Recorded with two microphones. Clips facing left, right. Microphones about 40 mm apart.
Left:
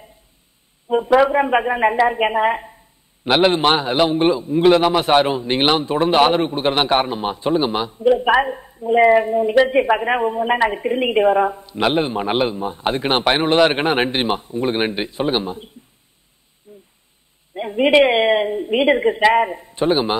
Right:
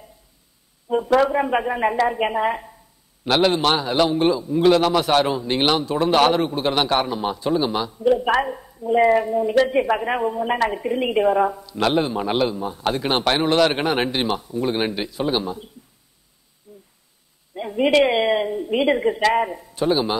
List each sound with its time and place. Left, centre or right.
0.8 s a woman's voice: left
16.7 s a sound: left
17.6 s a woman's voice: left